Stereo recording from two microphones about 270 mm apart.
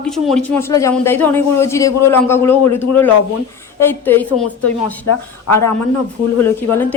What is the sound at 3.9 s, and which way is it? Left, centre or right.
Speech, centre.